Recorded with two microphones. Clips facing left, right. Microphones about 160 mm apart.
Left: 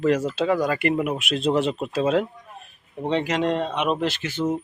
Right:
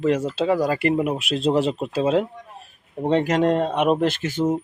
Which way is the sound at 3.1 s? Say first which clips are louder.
Right 4 dB; 45° right (ahead or behind).